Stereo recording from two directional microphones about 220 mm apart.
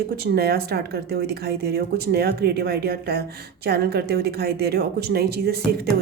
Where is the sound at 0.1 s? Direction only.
45° right (ahead or behind).